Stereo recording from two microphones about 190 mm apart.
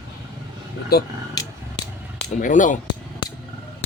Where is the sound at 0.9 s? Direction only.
55° left (ahead or behind).